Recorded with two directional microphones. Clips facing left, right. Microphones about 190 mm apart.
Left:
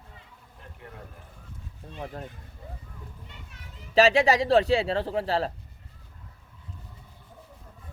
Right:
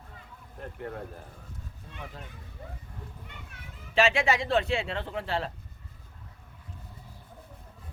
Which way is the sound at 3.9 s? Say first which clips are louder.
Left 5 dB; 35° left (ahead or behind).